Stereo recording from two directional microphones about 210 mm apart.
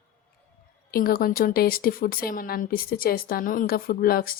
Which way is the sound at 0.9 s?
45° left (ahead or behind).